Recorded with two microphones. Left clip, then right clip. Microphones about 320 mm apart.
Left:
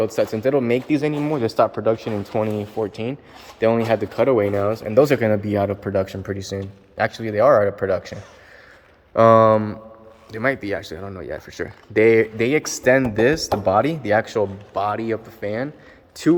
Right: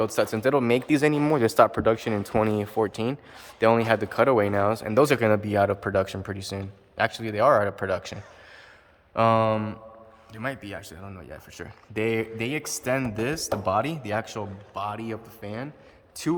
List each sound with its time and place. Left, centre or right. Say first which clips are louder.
0.0 s speech: left 4 dB; centre
2.5 s speech: left 1 dB; right
2.8 s speech: left 1 dB; centre
9.1 s speech: left 9 dB; centre